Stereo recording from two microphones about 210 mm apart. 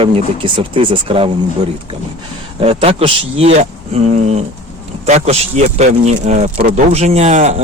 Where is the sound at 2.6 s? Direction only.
30° right (ahead or behind).